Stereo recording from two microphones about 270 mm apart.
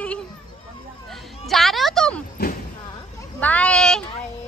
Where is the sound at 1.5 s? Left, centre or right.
Centre.